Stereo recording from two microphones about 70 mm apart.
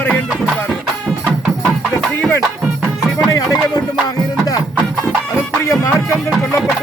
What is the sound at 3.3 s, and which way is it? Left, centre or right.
Music, left.